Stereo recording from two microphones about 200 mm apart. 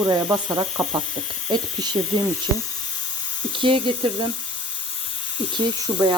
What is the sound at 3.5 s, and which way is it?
Speech, 25° right (ahead or behind).